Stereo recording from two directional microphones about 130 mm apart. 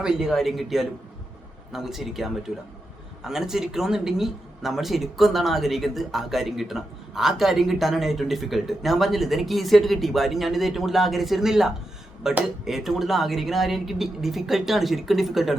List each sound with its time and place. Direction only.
0.0 s speech: 5° right (ahead or behind)